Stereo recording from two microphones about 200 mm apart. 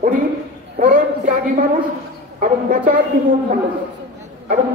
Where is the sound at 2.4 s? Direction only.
40° right (ahead or behind).